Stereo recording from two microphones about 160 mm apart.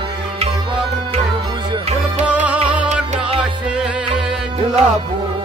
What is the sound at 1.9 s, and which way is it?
Music, 40° right (ahead or behind).